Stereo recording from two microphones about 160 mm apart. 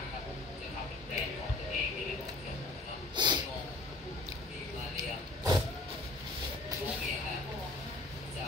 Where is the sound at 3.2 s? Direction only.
30° right (ahead or behind).